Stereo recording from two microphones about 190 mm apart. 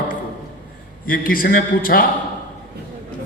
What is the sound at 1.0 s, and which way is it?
A man's voice, 50° left (ahead or behind).